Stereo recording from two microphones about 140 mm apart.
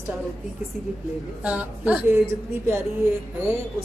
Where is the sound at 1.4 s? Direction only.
10° right (ahead or behind).